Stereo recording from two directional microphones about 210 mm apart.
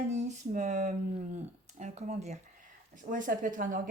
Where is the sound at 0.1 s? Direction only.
35° right (ahead or behind).